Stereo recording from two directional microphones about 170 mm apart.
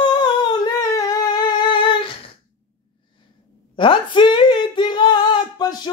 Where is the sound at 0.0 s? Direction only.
25° left (ahead or behind).